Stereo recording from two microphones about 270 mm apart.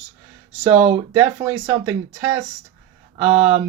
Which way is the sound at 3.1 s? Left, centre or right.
Right.